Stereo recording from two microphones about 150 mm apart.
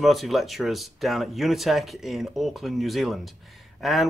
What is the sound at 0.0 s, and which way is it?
A man's voice, centre (ahead or behind).